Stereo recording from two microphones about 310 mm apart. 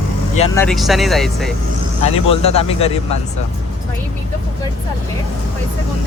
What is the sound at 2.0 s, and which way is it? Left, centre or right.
Speech, centre.